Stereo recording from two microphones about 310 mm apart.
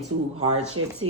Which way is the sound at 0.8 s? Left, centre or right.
Right.